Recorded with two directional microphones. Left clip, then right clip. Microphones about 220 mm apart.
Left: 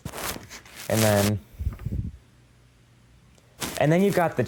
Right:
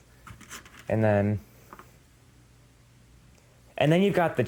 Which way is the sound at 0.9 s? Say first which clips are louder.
Left 2 dB; 5° left (ahead or behind).